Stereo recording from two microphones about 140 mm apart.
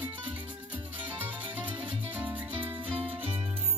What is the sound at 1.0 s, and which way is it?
Music, 15° right (ahead or behind).